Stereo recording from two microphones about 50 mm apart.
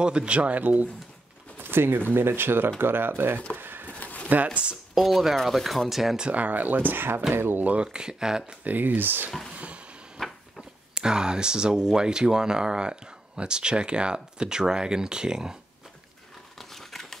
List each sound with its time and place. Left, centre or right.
0.0 s speech: centre
1.6 s speech: right
3.5 s a sound: right
4.0 s a sound: left
4.9 s speech: centre
6.1 s speech: right
7.6 s speech: right
8.6 s speech: right
10.2 s a sound: centre
11.0 s speech: centre
16.5 s scissors: centre